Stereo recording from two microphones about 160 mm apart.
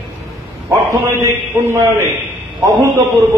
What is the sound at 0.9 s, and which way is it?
A man's voice, 20° right (ahead or behind).